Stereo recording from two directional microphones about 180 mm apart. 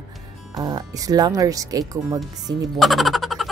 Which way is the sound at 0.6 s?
20° right (ahead or behind).